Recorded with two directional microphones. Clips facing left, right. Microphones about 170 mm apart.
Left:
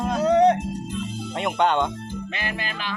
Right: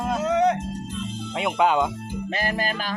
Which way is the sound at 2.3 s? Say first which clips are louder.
Right 9 dB; 40° right (ahead or behind).